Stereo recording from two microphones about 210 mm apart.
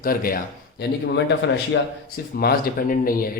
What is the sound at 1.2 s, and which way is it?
Speech, 60° left (ahead or behind).